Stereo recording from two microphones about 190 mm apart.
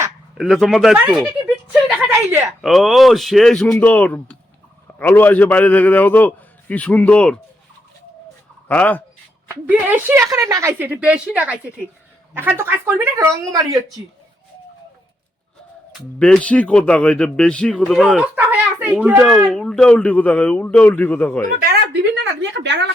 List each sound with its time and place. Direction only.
0.3 s a man's voice: centre (ahead or behind)
1.7 s a sound: 5° right (ahead or behind)
2.5 s a man's voice: centre (ahead or behind)
8.6 s speech: 10° left (ahead or behind)
9.6 s a woman's voice: 10° right (ahead or behind)
16.1 s a man's voice: 5° left (ahead or behind)
18.3 s a sound: 10° right (ahead or behind)
19.1 s a man's voice: centre (ahead or behind)
22.1 s a sound: 70° right (ahead or behind)